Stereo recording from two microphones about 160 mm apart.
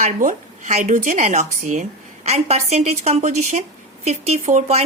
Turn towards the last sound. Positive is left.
turn(degrees=-45)  # may be behind; listen again after turning